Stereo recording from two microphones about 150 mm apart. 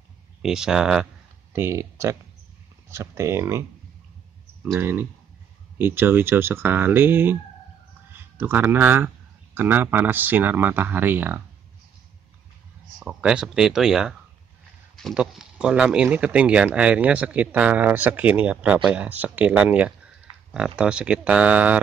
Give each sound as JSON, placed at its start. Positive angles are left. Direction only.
{"t": 0.4, "sound": "speech", "side_deg": -5}
{"t": 1.5, "sound": "speech", "side_deg": -15}
{"t": 4.7, "sound": "speech", "side_deg": -15}
{"t": 13.0, "sound": "speech", "side_deg": -5}
{"t": 15.1, "sound": "speech", "side_deg": -5}